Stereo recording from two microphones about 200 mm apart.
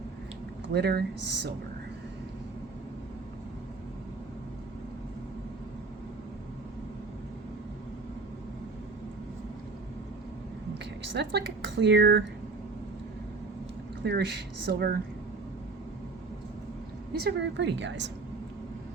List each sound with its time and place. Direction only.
0.7 s speech: 55° right (ahead or behind)
11.1 s speech: 55° right (ahead or behind)
14.0 s speech: 55° right (ahead or behind)
17.1 s speech: 55° right (ahead or behind)